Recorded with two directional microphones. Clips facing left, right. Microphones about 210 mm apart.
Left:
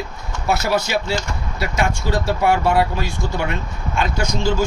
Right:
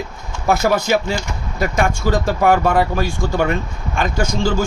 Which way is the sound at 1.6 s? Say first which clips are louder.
Right 4 dB; 50° right (ahead or behind).